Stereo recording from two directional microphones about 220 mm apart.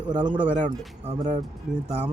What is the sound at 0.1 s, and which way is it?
Speech, 20° right (ahead or behind).